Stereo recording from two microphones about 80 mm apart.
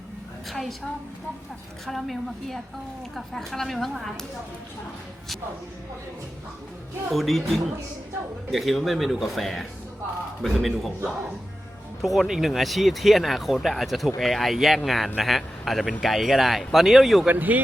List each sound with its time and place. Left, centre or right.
0.5 s speech: centre
1.9 s speech: centre
7.1 s speech: centre
12.0 s speech: centre
17.2 s speech: right